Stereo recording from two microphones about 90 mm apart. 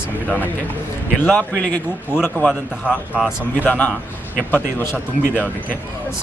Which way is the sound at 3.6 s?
20° left (ahead or behind).